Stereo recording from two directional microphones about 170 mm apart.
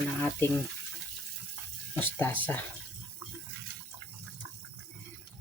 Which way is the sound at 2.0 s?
10° left (ahead or behind).